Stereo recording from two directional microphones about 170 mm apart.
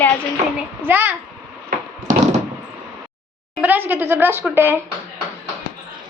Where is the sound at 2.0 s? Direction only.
45° right (ahead or behind).